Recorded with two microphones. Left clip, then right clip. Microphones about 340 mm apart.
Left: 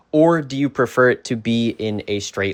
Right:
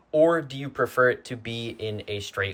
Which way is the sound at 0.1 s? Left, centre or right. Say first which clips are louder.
Left 5 dB; centre.